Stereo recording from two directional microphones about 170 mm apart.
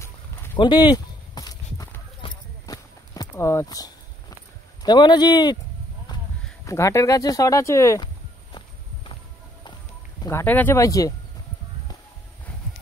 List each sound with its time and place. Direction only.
0.6 s walk: 25° left (ahead or behind)
4.8 s speech: 25° left (ahead or behind)
6.6 s speech: 20° left (ahead or behind)
10.2 s speech: 15° left (ahead or behind)